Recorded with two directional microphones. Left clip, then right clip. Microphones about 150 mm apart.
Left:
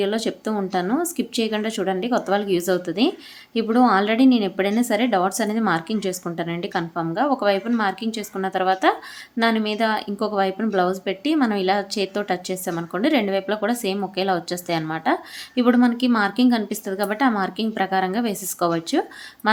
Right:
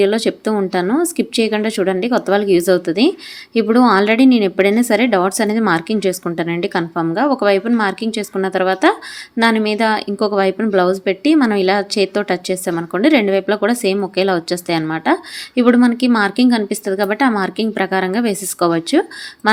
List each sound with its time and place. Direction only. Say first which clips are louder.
0.0 s a woman's voice: right 8 dB; 25° right (ahead or behind)